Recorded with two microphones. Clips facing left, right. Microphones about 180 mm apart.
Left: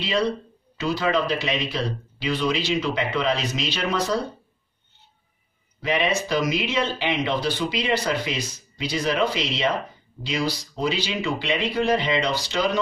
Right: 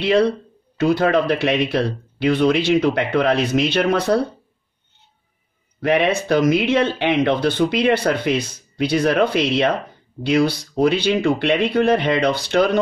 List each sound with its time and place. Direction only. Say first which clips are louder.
0.0 s speech: right 7 dB; 60° right (ahead or behind)
5.8 s speech: right 6 dB; 60° right (ahead or behind)